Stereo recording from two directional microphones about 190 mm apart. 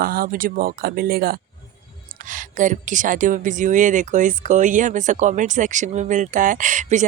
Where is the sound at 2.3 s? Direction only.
40° right (ahead or behind).